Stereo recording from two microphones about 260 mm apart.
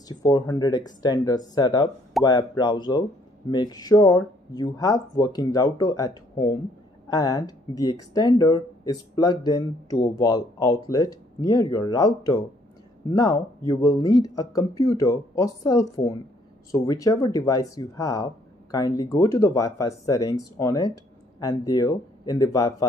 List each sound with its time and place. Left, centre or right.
0.1 s speech: centre